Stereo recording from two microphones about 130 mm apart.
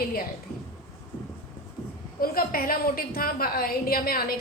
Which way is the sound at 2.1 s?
90° left.